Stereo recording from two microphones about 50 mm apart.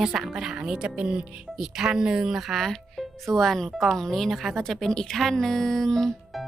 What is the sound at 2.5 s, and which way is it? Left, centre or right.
Speech, centre.